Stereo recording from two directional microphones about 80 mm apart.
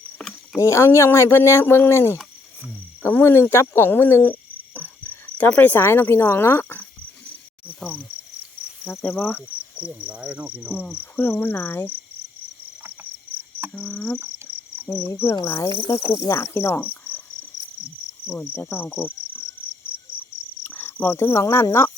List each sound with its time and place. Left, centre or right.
0.5 s speech: left
7.8 s insect: centre
9.2 s cricket: left
10.1 s speech: centre
10.8 s cricket: centre
13.3 s cricket: right
13.7 s speech: centre
15.0 s speech: left
15.9 s cricket: left
18.3 s cricket: left
20.7 s speech: left